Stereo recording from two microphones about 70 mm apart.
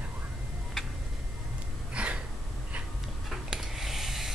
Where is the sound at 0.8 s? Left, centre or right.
Centre.